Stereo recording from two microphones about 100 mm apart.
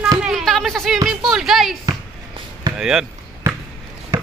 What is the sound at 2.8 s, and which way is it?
Speech, 5° right (ahead or behind).